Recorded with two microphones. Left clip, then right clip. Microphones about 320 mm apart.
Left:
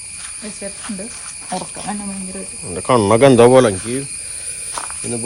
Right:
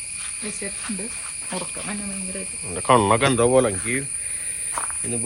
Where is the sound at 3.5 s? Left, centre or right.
Left.